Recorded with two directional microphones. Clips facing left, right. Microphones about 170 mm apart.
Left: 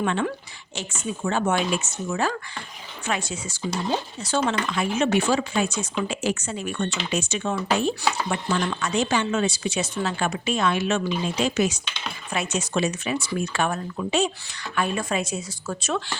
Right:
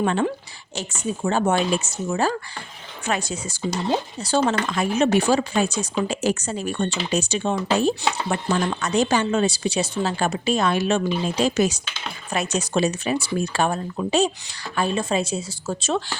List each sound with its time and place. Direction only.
0.0 s speech: 35° right (ahead or behind)
8.3 s speech: 45° right (ahead or behind)